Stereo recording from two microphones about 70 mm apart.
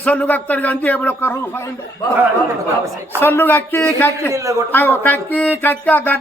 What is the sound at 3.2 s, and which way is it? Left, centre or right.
Speech, left.